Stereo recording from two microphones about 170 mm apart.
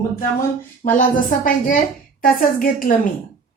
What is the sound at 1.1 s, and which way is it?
A woman's voice, 50° left (ahead or behind).